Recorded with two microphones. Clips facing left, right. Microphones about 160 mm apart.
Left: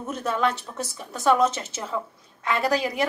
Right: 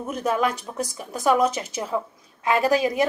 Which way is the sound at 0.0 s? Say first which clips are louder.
Right 2 dB; 10° right (ahead or behind).